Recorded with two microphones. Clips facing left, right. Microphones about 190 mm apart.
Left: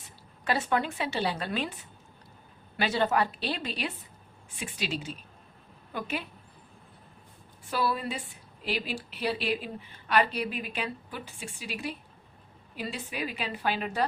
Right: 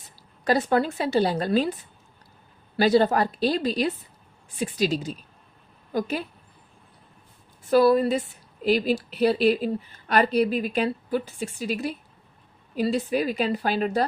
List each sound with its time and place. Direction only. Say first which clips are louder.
0.4 s a woman's voice: right 7 dB; 40° right (ahead or behind)
2.7 s a woman's voice: right 7 dB; 35° right (ahead or behind)
7.7 s a woman's voice: right 12 dB; 40° right (ahead or behind)